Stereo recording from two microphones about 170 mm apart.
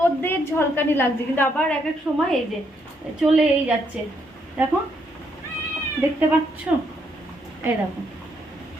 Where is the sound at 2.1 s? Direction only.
10° right (ahead or behind).